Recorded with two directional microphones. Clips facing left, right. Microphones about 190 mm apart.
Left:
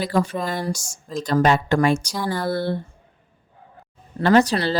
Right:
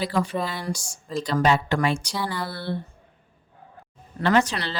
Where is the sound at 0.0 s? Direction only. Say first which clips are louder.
Left 3 dB; 45° left (ahead or behind).